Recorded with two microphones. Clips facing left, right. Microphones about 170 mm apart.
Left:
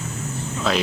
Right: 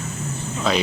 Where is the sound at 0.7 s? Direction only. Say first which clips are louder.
Right 1 dB; centre (ahead or behind).